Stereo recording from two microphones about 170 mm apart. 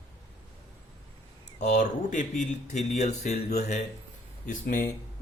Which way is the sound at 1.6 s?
45° left (ahead or behind).